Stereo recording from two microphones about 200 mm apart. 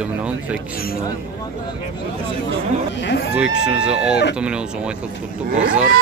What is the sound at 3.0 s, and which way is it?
Speech, 60° left (ahead or behind).